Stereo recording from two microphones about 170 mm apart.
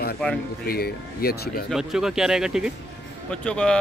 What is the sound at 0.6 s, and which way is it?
Speech, 65° left (ahead or behind).